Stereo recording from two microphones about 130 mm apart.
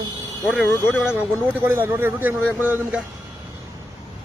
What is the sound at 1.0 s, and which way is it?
Speech, 10° right (ahead or behind).